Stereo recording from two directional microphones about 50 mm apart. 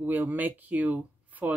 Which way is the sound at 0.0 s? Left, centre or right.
Right.